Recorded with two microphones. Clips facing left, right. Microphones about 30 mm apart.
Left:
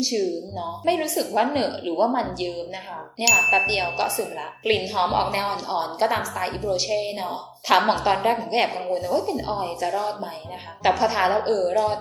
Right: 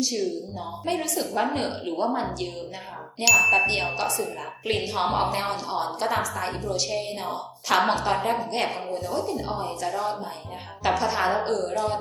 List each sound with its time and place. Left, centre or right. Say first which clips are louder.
0.2 s speech: left 3 dB; centre
3.2 s speech: even; centre